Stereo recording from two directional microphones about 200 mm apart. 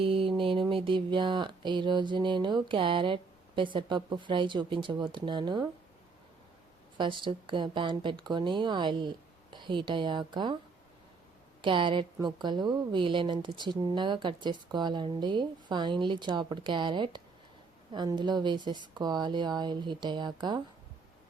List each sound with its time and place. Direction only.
0.0 s music: 25° right (ahead or behind)
0.7 s a woman's voice: 25° right (ahead or behind)
6.9 s a woman's voice: 25° right (ahead or behind)
11.6 s a woman's voice: 25° right (ahead or behind)